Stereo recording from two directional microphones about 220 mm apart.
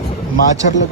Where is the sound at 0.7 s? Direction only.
35° left (ahead or behind).